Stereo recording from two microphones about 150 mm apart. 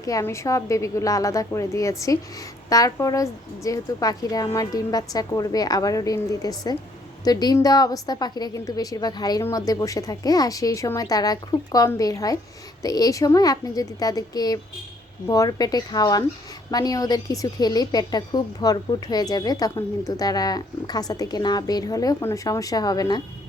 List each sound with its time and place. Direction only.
0.0 s a woman's voice: 20° left (ahead or behind)